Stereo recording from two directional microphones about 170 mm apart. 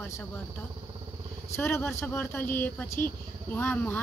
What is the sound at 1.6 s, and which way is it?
Speech, 15° left (ahead or behind).